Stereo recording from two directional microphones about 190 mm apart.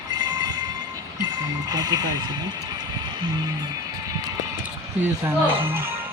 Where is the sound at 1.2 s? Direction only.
20° right (ahead or behind).